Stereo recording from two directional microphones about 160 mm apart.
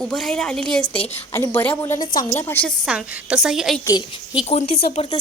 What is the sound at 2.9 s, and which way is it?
Speech, 5° right (ahead or behind).